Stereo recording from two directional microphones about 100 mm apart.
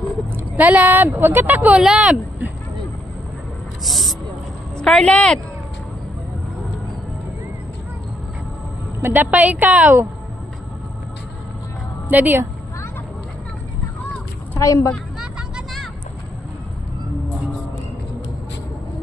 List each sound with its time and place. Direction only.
0.6 s speech: 15° right (ahead or behind)
1.8 s a woman's voice: 5° right (ahead or behind)
3.8 s a woman's voice: centre (ahead or behind)
9.0 s a woman's voice: 20° right (ahead or behind)
12.1 s a woman's voice: 20° right (ahead or behind)
14.6 s a woman's voice: 35° left (ahead or behind)
15.1 s music: 5° right (ahead or behind)